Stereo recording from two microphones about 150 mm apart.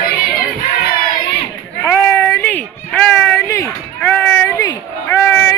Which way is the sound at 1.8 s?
20° left (ahead or behind).